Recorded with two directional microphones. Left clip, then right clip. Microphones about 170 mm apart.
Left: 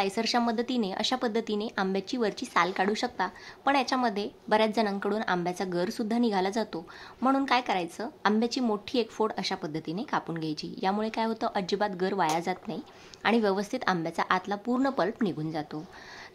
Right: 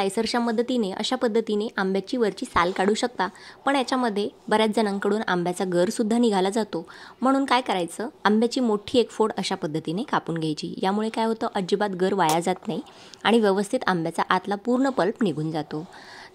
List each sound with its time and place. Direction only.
0.0 s speech: 25° right (ahead or behind)